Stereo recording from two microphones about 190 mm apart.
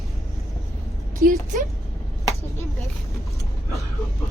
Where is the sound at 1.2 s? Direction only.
45° right (ahead or behind).